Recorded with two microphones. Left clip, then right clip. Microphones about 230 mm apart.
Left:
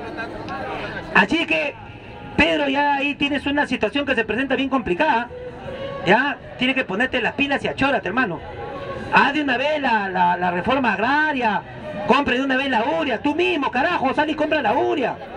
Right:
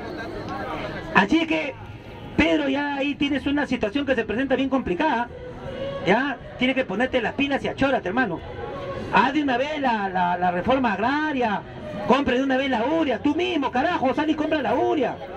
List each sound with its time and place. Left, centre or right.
1.1 s speech: left